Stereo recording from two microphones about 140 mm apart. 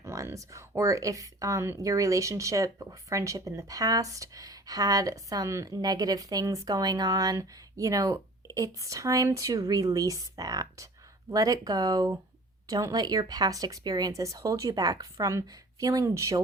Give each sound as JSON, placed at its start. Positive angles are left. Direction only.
{"t": 0.0, "sound": "speech", "side_deg": -20}